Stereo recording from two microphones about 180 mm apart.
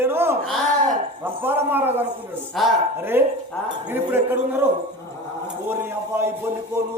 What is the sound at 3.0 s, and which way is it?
A man's voice, 10° right (ahead or behind).